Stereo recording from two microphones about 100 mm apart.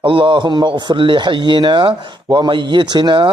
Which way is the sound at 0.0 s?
55° right (ahead or behind).